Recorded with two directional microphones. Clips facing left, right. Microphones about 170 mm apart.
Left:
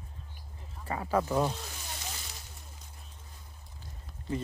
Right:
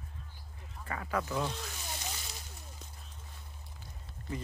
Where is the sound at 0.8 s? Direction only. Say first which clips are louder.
Left 6 dB; 30° left (ahead or behind).